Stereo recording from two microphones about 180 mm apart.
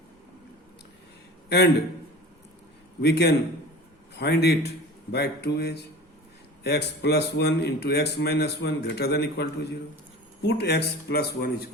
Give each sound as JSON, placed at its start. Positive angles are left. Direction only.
{"t": 1.5, "sound": "a man's voice", "side_deg": 65}
{"t": 3.0, "sound": "a man's voice", "side_deg": 65}